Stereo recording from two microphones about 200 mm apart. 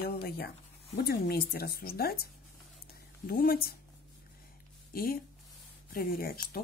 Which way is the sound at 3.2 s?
45° left (ahead or behind).